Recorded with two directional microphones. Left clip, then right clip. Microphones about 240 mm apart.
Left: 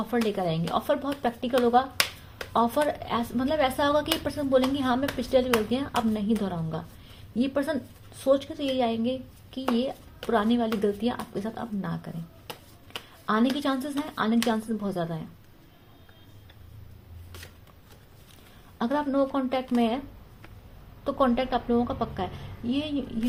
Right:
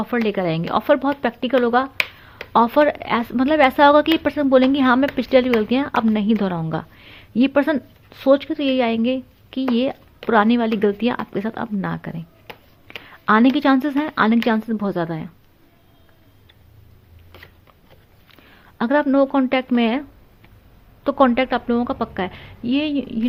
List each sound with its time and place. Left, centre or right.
0.0 s a woman's voice: right
12.9 s a sound: right
13.2 s a woman's voice: right
18.8 s a woman's voice: right
21.0 s a woman's voice: right